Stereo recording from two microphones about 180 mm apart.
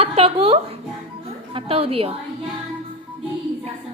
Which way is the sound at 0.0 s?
35° right (ahead or behind).